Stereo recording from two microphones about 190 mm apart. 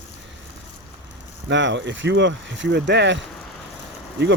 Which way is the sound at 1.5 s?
70° right (ahead or behind).